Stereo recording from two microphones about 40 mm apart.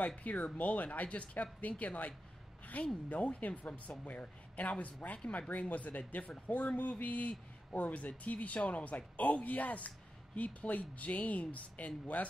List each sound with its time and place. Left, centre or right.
0.2 s a man's voice: left
2.6 s a sound: left
3.1 s a man's voice: left